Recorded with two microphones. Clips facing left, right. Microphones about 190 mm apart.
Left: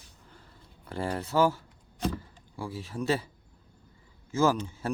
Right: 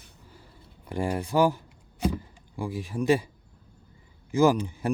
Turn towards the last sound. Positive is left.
turn(degrees=-15)  # may be behind; listen again after turning